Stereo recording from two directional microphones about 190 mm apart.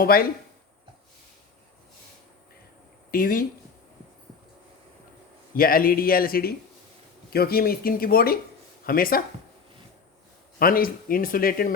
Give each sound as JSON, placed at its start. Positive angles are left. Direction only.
{"t": 0.0, "sound": "speech", "side_deg": 50}
{"t": 3.1, "sound": "speech", "side_deg": 45}
{"t": 5.5, "sound": "speech", "side_deg": 50}
{"t": 10.6, "sound": "speech", "side_deg": 50}